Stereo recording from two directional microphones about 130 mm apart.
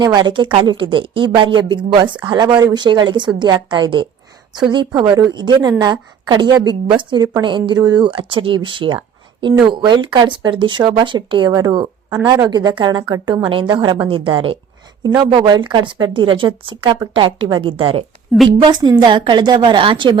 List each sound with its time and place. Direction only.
0.0 s speech: 35° right (ahead or behind)